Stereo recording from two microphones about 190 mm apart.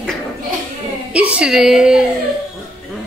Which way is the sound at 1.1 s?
5° right (ahead or behind).